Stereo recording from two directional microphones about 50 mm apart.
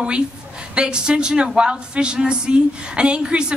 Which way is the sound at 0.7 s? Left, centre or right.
Centre.